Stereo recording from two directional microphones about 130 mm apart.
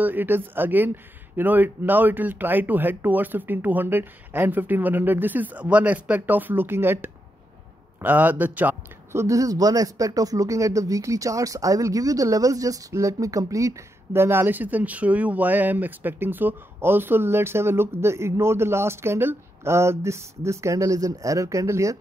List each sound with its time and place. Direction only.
0.0 s a man's voice: 15° right (ahead or behind)